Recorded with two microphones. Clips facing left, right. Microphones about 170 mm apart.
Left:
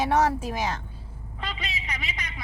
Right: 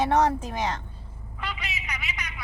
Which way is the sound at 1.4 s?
30° left (ahead or behind).